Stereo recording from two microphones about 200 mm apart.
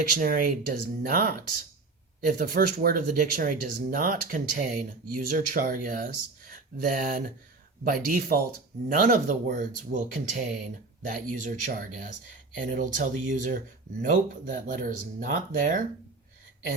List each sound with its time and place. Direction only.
0.1 s speech: 45° right (ahead or behind)